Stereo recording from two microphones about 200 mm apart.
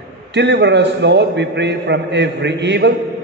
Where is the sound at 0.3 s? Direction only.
60° right (ahead or behind).